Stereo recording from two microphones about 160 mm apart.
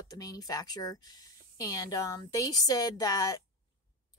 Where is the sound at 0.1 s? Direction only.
25° left (ahead or behind).